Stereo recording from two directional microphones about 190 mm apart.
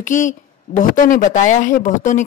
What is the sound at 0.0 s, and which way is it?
A woman's voice, 40° left (ahead or behind).